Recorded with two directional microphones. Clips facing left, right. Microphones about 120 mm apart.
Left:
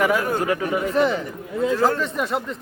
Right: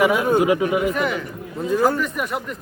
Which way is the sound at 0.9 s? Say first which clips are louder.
Left 3 dB; 30° left (ahead or behind).